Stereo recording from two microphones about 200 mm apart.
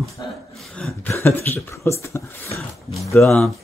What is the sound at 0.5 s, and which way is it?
Cough, centre (ahead or behind).